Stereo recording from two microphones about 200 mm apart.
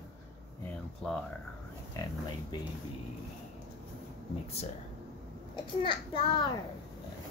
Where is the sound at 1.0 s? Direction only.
5° left (ahead or behind).